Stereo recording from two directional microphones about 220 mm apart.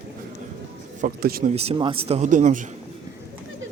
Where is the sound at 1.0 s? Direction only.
45° right (ahead or behind).